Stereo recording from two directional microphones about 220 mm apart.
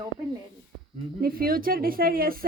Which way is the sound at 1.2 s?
40° right (ahead or behind).